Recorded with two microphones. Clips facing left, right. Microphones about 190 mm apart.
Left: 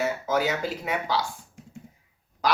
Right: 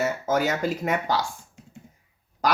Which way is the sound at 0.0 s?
45° right (ahead or behind).